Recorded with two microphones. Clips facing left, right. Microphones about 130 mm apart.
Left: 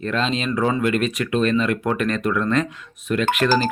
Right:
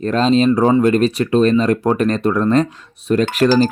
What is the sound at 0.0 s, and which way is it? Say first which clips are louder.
Speech: right 9 dB; 40° right (ahead or behind).